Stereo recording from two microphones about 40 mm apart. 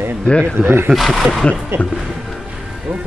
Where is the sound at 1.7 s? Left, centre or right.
Right.